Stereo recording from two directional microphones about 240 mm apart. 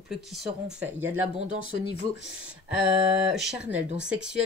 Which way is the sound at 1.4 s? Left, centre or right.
Right.